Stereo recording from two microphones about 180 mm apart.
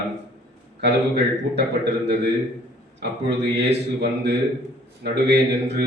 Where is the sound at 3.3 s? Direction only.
70° right (ahead or behind).